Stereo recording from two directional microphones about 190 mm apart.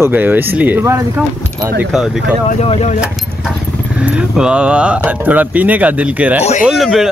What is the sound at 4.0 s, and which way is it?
Speech, 5° right (ahead or behind).